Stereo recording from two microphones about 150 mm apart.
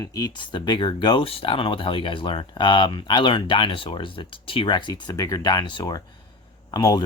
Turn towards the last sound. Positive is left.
turn(degrees=25)  # may be behind; listen again after turning